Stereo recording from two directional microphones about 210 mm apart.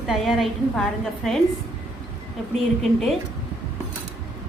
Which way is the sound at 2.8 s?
Centre (ahead or behind).